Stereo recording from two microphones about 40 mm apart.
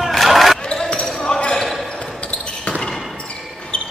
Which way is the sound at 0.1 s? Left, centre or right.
Centre.